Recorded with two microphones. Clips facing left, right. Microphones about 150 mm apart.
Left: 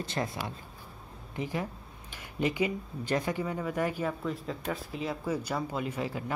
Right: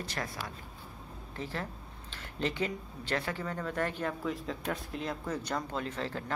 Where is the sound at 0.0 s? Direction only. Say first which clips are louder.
Left 5 dB; 25° left (ahead or behind).